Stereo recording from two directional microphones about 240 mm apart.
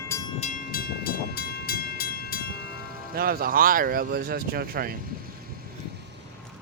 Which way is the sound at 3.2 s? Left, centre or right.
Right.